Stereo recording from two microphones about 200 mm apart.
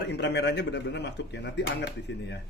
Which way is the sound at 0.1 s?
60° left (ahead or behind).